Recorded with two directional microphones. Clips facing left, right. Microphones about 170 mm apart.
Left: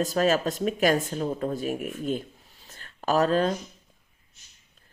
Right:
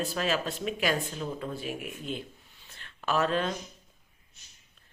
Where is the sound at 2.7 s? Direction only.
40° left (ahead or behind).